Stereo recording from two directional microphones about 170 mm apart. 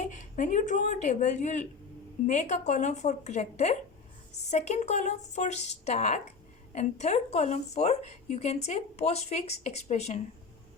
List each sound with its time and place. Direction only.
0.0 s a woman's voice: 45° left (ahead or behind)